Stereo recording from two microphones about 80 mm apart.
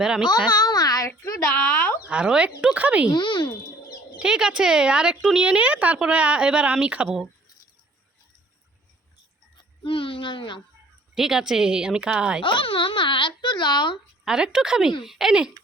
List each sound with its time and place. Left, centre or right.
0.3 s a sound: left
1.5 s speech: left
2.0 s speech: centre
3.2 s a child's voice: left
4.2 s speech: centre
9.8 s speech: left
11.1 s speech: centre
12.4 s speech: left
14.3 s speech: centre